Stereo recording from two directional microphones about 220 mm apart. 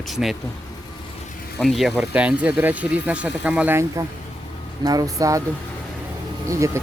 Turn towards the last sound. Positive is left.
turn(degrees=-15)  # may be behind; listen again after turning